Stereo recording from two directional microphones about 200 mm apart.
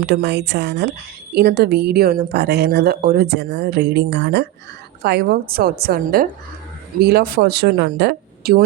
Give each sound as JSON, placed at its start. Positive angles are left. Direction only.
{"t": 0.0, "sound": "speech", "side_deg": -55}